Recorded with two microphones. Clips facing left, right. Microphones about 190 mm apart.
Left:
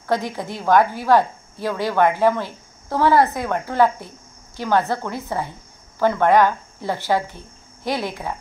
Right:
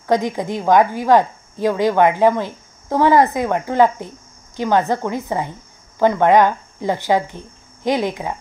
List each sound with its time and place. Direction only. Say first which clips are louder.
0.0 s a woman's voice: right 5 dB; 15° right (ahead or behind)